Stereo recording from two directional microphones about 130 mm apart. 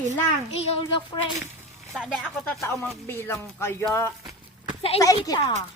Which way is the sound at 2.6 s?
20° left (ahead or behind).